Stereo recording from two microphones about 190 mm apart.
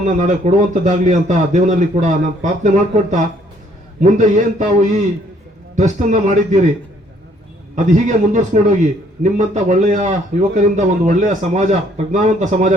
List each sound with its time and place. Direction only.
0.0 s a man's voice: 40° right (ahead or behind)
7.8 s a man's voice: 40° right (ahead or behind)